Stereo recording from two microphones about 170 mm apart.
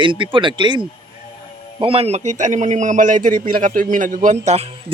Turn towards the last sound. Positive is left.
turn(degrees=-40)  # may be behind; listen again after turning